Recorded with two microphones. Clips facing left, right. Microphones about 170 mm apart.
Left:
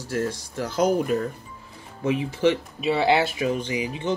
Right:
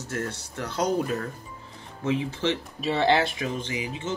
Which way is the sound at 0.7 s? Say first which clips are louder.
Left 4 dB; 10° left (ahead or behind).